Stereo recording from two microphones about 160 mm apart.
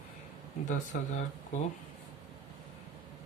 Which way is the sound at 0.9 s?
55° left (ahead or behind).